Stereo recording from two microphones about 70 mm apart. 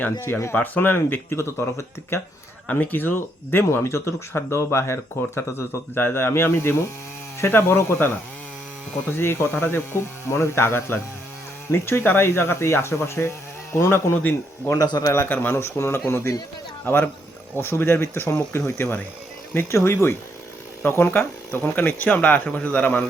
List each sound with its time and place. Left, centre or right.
0.0 s speech: left
0.5 s speech: left
2.6 s speech: left
9.1 s speech: left
14.2 s speech: left
14.8 s a man's voice: left
15.3 s speech: left